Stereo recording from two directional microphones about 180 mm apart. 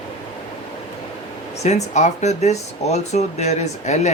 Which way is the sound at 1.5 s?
40° left (ahead or behind).